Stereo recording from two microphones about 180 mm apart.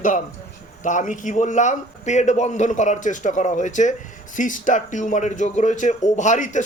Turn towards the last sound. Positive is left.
turn(degrees=45)  # may be behind; listen again after turning